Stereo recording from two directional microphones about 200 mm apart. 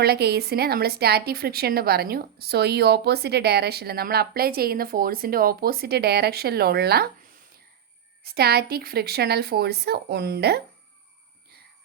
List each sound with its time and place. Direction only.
0.0 s speech: 55° right (ahead or behind)
8.2 s speech: 55° right (ahead or behind)